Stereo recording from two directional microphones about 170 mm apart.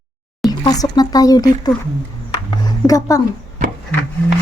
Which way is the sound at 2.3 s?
25° left (ahead or behind).